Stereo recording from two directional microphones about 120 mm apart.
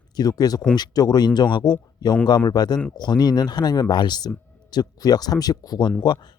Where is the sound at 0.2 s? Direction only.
30° left (ahead or behind).